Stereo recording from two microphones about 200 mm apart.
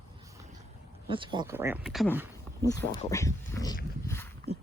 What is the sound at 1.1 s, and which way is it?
Speech, 25° right (ahead or behind).